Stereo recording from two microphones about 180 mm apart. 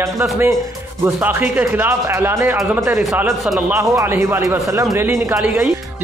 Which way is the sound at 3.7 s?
15° right (ahead or behind).